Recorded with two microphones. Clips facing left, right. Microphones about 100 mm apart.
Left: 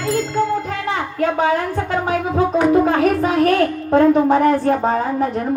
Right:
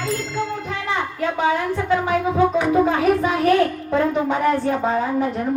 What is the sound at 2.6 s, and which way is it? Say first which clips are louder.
A woman's voice: left 3 dB; 45° left (ahead or behind).